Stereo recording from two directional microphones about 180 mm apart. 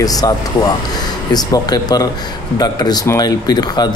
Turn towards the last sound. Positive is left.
turn(degrees=20)  # may be behind; listen again after turning